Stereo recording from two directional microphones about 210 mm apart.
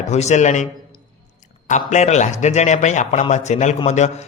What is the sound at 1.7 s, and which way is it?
A man's voice, 35° left (ahead or behind).